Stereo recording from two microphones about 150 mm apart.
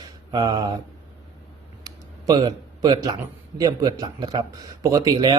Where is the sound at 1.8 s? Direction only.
30° right (ahead or behind).